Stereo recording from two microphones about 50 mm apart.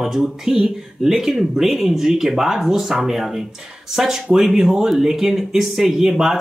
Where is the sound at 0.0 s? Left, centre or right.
Centre.